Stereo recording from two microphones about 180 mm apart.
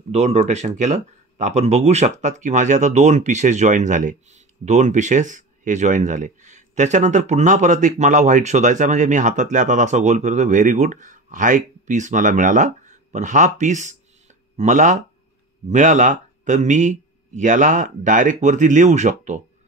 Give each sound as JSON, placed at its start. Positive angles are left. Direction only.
{"t": 0.1, "sound": "speech", "side_deg": -40}